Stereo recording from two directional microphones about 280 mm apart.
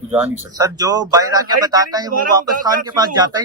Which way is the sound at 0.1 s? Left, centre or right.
Centre.